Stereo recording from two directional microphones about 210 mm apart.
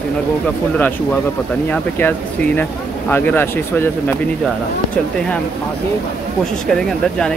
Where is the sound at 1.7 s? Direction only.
10° left (ahead or behind).